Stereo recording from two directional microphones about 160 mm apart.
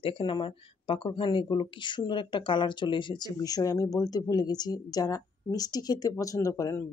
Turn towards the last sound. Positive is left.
turn(degrees=20)  # may be behind; listen again after turning